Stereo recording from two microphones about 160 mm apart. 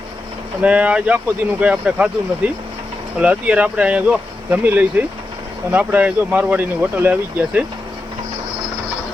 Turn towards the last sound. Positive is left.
turn(degrees=-10)  # may be behind; listen again after turning